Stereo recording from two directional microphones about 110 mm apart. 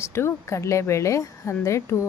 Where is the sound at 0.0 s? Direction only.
25° left (ahead or behind).